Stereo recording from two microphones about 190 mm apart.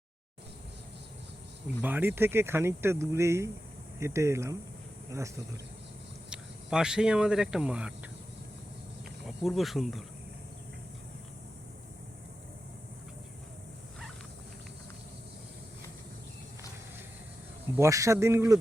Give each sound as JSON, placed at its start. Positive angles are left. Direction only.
{"t": 1.8, "sound": "speech", "side_deg": -10}
{"t": 6.3, "sound": "speech", "side_deg": -5}
{"t": 9.2, "sound": "speech", "side_deg": 0}
{"t": 17.7, "sound": "speech", "side_deg": -15}